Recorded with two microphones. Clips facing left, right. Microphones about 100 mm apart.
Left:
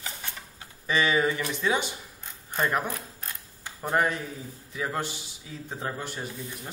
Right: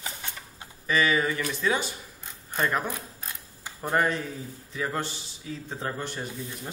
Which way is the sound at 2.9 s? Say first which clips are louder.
Even; 5° right (ahead or behind).